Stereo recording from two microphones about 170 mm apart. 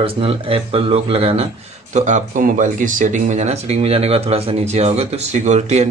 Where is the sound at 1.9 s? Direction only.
50° right (ahead or behind).